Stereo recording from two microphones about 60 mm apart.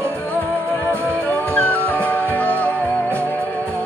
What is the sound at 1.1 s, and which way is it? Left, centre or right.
Music, left.